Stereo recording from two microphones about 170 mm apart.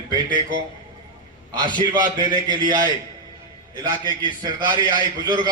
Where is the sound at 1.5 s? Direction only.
25° right (ahead or behind).